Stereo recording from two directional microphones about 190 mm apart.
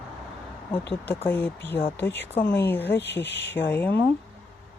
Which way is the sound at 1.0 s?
10° left (ahead or behind).